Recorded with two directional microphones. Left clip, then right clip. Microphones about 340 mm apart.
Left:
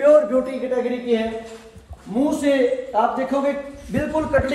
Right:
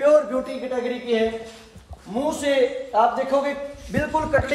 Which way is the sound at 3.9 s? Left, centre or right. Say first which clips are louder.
Left 1 dB; right.